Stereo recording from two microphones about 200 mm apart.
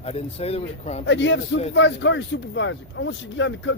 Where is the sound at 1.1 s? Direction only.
65° left (ahead or behind).